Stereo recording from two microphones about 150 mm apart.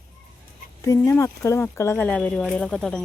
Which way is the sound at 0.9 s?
20° left (ahead or behind).